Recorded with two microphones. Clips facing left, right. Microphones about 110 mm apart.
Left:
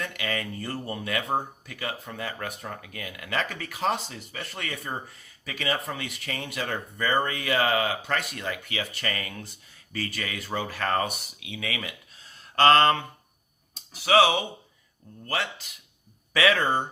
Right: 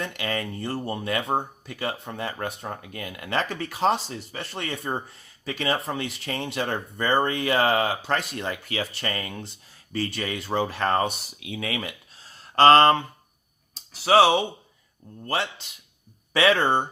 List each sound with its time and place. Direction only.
0.0 s speech: 30° right (ahead or behind)